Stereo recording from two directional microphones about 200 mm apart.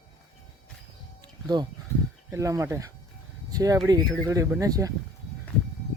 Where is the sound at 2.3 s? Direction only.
15° right (ahead or behind).